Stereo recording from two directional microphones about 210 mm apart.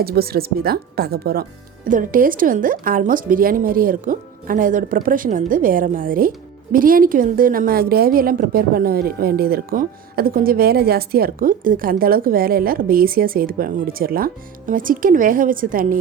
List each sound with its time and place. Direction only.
0.0 s a woman's voice: 45° right (ahead or behind)